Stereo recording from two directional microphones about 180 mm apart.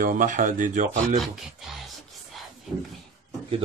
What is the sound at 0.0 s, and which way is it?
Speech, 50° right (ahead or behind).